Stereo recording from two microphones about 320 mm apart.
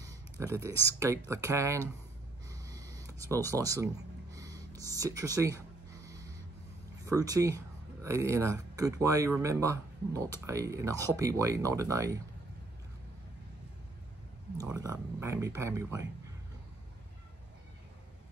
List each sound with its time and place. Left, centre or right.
0.0 s speech: centre
2.5 s a sound: centre
3.4 s speech: centre
7.1 s speech: centre
14.6 s speech: centre